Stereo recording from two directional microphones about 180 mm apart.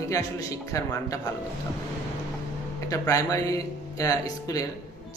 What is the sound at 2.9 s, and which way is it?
A man's voice, 20° left (ahead or behind).